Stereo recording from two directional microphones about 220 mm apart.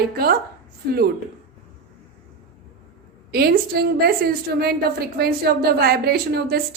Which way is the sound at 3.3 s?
45° right (ahead or behind).